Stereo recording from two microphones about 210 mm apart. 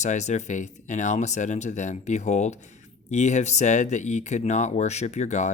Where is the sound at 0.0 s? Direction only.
35° left (ahead or behind).